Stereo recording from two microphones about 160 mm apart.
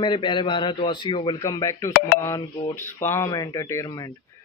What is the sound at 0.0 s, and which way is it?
Speech, 30° left (ahead or behind).